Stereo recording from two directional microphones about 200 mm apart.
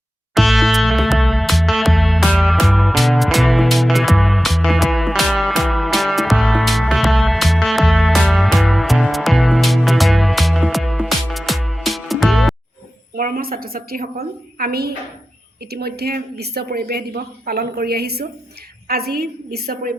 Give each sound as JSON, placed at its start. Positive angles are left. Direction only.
{"t": 0.3, "sound": "music", "side_deg": 0}
{"t": 13.1, "sound": "a woman's voice", "side_deg": -45}